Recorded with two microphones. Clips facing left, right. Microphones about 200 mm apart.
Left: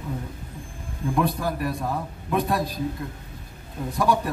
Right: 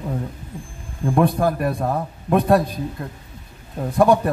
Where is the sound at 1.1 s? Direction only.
55° right (ahead or behind).